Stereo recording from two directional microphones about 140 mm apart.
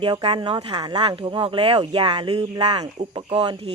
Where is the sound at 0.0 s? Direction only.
35° right (ahead or behind).